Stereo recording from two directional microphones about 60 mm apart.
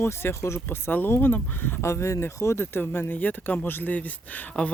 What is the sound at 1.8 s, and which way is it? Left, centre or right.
Speech, left.